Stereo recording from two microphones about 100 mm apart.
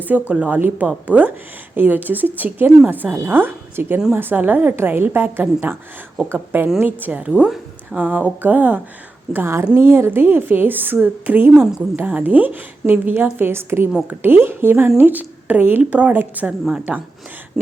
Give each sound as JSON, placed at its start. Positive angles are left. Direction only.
{"t": 0.0, "sound": "a woman's voice", "side_deg": -15}